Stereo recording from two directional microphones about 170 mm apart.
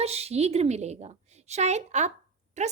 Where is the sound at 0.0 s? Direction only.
40° right (ahead or behind).